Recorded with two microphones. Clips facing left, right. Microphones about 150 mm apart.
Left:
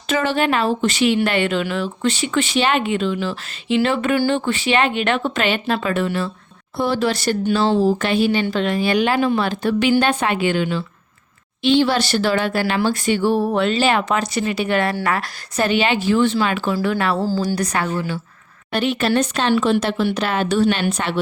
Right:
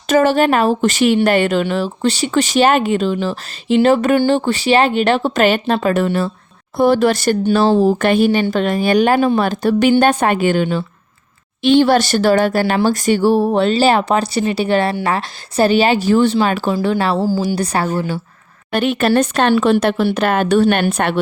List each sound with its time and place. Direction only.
0.1 s a woman's voice: 45° right (ahead or behind)
17.2 s a woman's voice: 10° right (ahead or behind)
17.4 s speech: 30° right (ahead or behind)
18.7 s speech: 50° right (ahead or behind)